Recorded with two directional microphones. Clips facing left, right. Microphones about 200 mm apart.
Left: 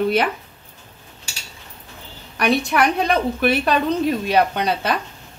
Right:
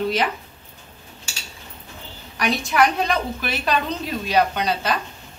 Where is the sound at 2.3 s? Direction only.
60° left (ahead or behind).